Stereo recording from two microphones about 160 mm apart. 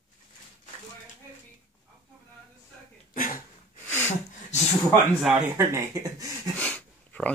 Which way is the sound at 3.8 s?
10° left (ahead or behind).